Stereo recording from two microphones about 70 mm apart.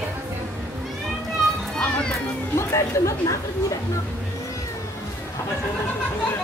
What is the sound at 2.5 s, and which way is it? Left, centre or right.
Speech, left.